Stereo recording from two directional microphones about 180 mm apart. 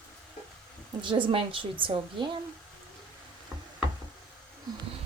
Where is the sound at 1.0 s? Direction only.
25° right (ahead or behind).